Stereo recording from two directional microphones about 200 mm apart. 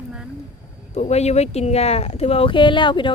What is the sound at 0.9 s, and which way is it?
Speech, 35° left (ahead or behind).